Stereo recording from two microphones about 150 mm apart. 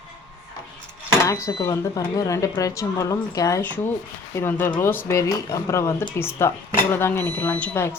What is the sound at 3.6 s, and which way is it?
Speech, 10° left (ahead or behind).